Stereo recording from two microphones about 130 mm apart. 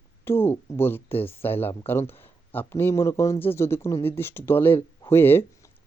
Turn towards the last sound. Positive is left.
turn(degrees=15)  # may be behind; listen again after turning